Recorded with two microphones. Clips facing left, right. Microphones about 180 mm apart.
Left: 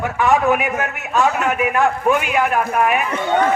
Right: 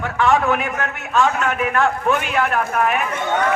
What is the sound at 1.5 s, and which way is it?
A man's voice, 5° left (ahead or behind).